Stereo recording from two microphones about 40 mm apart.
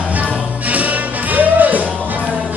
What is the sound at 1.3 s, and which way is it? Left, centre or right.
Music, right.